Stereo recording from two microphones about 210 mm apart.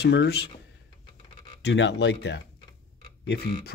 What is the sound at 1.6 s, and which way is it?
Speech, 55° left (ahead or behind).